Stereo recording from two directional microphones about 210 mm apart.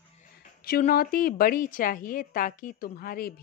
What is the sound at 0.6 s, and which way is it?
A woman's voice, 45° left (ahead or behind).